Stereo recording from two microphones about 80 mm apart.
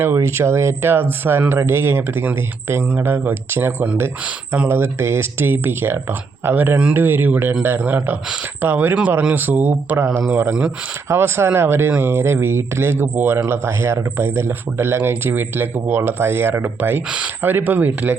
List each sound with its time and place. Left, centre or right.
0.0 s speech: right